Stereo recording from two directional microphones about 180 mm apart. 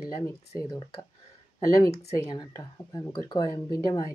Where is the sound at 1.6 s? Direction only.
20° left (ahead or behind).